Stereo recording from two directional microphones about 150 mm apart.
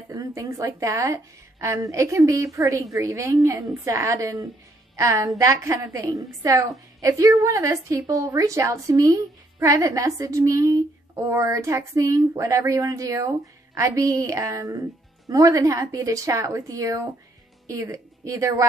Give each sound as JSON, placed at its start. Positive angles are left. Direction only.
{"t": 0.1, "sound": "a woman's voice", "side_deg": -20}